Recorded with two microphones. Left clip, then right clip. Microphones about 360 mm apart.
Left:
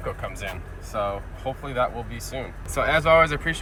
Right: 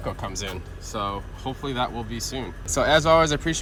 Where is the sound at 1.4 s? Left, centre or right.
Right.